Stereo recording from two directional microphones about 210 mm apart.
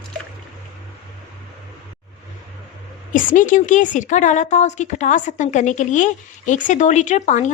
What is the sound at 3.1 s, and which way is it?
A woman's voice, 40° left (ahead or behind).